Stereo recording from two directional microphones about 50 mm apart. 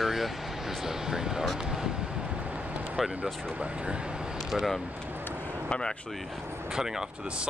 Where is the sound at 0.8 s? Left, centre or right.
Centre.